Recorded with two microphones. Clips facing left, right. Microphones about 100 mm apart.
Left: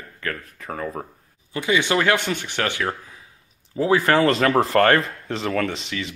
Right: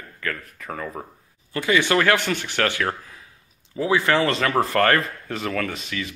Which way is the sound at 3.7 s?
35° left (ahead or behind).